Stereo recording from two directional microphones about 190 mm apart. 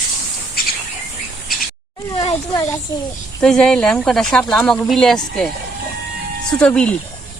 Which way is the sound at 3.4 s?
5° left (ahead or behind).